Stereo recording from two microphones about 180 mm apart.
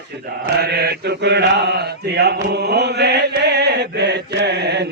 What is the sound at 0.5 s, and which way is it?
Mantra, 65° right (ahead or behind).